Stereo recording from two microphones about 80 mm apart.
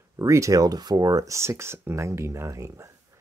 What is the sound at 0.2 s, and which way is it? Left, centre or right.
Speech, right.